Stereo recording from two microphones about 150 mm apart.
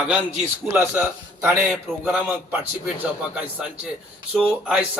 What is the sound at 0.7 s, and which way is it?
Speech, 15° right (ahead or behind).